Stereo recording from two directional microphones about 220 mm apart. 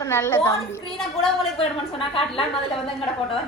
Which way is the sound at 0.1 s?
10° left (ahead or behind).